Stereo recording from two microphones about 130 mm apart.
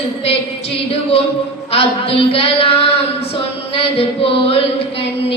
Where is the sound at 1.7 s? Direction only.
50° left (ahead or behind).